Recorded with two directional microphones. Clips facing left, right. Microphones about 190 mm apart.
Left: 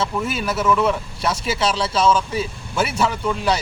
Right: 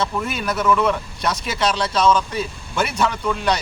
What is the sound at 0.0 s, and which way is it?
Speech, 5° left (ahead or behind).